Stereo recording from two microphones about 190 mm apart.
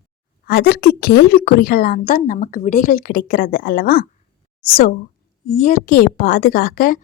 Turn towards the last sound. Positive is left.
turn(degrees=45)  # may be behind; listen again after turning